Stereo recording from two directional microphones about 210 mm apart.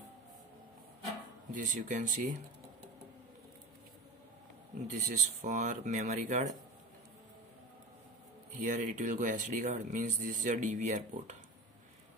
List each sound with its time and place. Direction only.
1.5 s speech: 35° right (ahead or behind)
4.8 s speech: 35° right (ahead or behind)
8.5 s speech: 35° right (ahead or behind)